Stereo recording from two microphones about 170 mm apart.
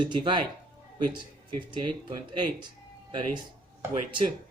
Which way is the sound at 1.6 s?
25° right (ahead or behind).